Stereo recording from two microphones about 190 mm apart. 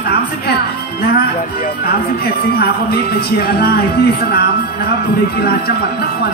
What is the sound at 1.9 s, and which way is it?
Speech, 55° left (ahead or behind).